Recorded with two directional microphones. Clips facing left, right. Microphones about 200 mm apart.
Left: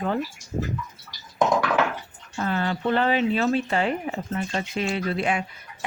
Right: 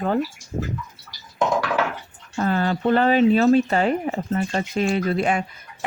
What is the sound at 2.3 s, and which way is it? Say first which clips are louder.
Speech: right 4 dB; 40° right (ahead or behind).